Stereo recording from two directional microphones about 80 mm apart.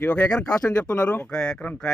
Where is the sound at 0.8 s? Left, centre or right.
Centre.